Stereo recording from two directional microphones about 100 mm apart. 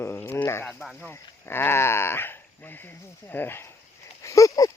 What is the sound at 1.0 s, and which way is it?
Speech, 25° left (ahead or behind).